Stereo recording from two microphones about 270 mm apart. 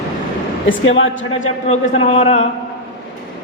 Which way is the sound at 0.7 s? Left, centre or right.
Left.